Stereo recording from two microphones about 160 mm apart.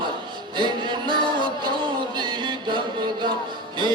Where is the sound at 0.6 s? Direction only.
30° right (ahead or behind).